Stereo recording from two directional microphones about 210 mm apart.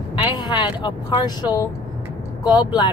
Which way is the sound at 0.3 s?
20° left (ahead or behind).